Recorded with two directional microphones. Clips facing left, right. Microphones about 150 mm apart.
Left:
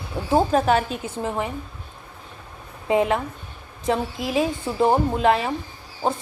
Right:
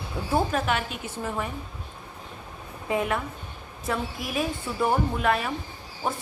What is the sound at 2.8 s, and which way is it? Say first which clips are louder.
Speech: left 6 dB; 25° left (ahead or behind).